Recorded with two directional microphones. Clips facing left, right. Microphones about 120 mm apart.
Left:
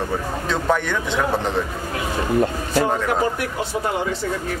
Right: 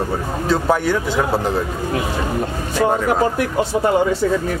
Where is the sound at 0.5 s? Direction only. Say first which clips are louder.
Right 4 dB; 10° right (ahead or behind).